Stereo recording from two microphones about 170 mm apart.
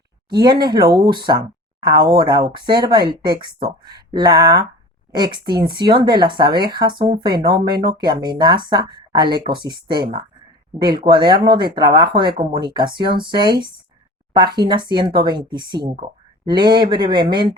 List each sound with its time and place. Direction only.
0.3 s speech: 25° right (ahead or behind)